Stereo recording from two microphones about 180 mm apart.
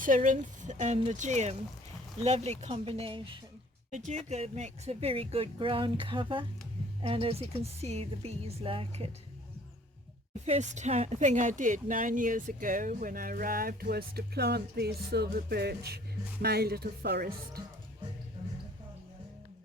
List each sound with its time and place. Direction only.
0.0 s speech: 45° right (ahead or behind); by 3.3 s 30° right (ahead or behind)
3.9 s speech: 40° right (ahead or behind)
10.4 s speech: 40° right (ahead or behind); by 17.6 s 60° right (ahead or behind)